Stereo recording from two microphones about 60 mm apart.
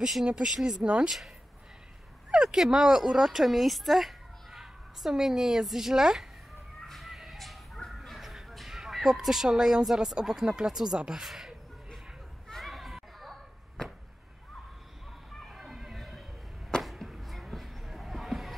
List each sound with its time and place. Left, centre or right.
0.0 s speech: centre
2.3 s speech: centre
6.9 s a sound: centre
10.1 s speech: centre
12.4 s children playing: centre
15.4 s a sound: centre